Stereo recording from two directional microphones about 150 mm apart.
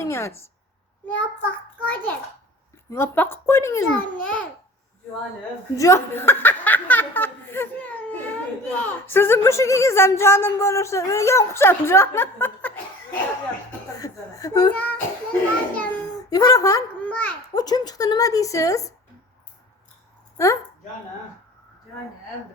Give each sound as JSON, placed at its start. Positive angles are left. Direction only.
{"t": 0.0, "sound": "a sound", "side_deg": 15}
{"t": 1.0, "sound": "speech", "side_deg": 10}
{"t": 5.7, "sound": "speech", "side_deg": 20}
{"t": 13.9, "sound": "speech", "side_deg": 25}
{"t": 14.7, "sound": "speech", "side_deg": 10}
{"t": 16.3, "sound": "speech", "side_deg": 25}
{"t": 17.0, "sound": "a sound", "side_deg": 10}
{"t": 17.5, "sound": "speech", "side_deg": 25}
{"t": 20.4, "sound": "speech", "side_deg": 20}